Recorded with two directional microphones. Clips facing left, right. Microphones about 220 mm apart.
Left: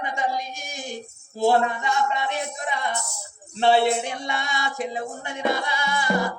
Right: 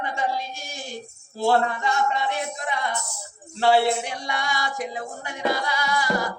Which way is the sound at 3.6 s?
20° left (ahead or behind).